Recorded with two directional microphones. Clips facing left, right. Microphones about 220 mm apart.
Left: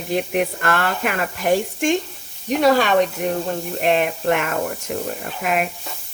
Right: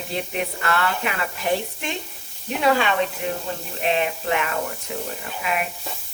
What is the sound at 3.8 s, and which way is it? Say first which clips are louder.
Speech: left 3 dB; 55° left (ahead or behind).